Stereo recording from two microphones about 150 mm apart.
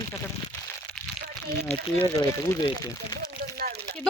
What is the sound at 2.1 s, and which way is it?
Speech, 25° left (ahead or behind).